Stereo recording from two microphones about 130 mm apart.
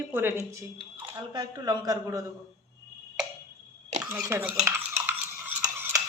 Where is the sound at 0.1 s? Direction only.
15° right (ahead or behind).